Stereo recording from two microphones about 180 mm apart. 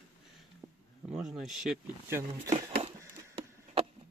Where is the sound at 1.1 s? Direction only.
Centre (ahead or behind).